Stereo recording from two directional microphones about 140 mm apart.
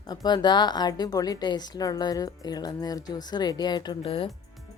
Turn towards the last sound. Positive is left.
turn(degrees=40)  # may be behind; listen again after turning